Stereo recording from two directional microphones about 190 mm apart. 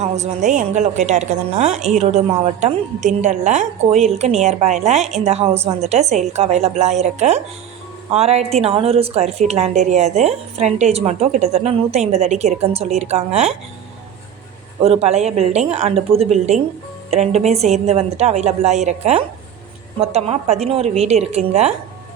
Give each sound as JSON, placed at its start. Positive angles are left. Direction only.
{"t": 0.0, "sound": "a woman's voice", "side_deg": -35}
{"t": 14.8, "sound": "a woman's voice", "side_deg": -35}